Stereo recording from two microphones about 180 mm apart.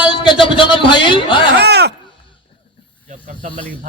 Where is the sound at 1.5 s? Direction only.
65° right (ahead or behind).